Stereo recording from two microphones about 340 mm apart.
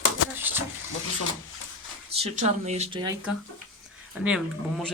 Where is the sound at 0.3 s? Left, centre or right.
Centre.